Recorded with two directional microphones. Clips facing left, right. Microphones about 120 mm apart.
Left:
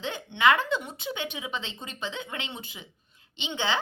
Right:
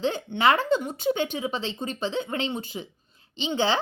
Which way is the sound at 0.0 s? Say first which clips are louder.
Right 2 dB; 40° right (ahead or behind).